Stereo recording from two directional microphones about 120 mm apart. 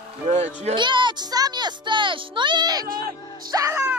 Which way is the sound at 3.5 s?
25° right (ahead or behind).